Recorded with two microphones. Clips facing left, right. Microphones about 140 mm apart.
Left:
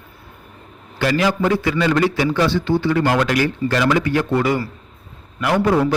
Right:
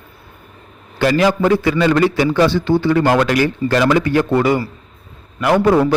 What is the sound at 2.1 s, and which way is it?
Speech, 55° right (ahead or behind).